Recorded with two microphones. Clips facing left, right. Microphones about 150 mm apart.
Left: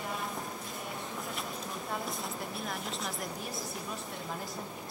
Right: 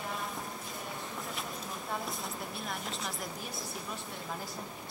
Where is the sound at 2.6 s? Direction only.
Centre (ahead or behind).